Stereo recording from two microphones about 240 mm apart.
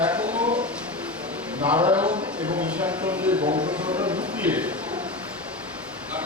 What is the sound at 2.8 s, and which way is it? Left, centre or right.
Speech, centre.